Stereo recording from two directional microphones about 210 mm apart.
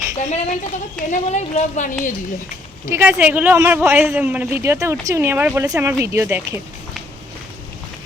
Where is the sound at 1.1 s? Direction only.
35° left (ahead or behind).